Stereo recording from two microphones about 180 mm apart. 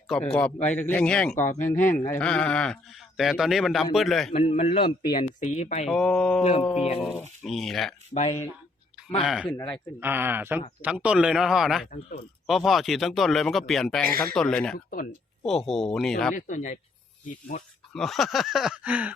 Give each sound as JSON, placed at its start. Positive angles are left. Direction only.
{"t": 0.1, "sound": "speech", "side_deg": 5}
{"t": 4.3, "sound": "a man's voice", "side_deg": 35}
{"t": 5.1, "sound": "a man's voice", "side_deg": 40}
{"t": 5.9, "sound": "speech", "side_deg": 5}
{"t": 7.4, "sound": "speech", "side_deg": 0}
{"t": 8.1, "sound": "a man's voice", "side_deg": 40}
{"t": 9.2, "sound": "speech", "side_deg": 0}
{"t": 16.3, "sound": "a man's voice", "side_deg": 45}
{"t": 17.9, "sound": "speech", "side_deg": 0}